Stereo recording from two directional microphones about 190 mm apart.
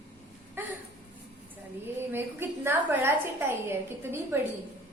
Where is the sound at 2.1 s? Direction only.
10° right (ahead or behind).